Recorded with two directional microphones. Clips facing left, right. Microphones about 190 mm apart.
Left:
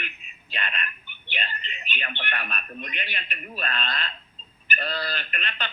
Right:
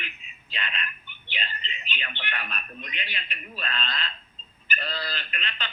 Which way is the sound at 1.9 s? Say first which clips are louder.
Left 4 dB; 55° left (ahead or behind).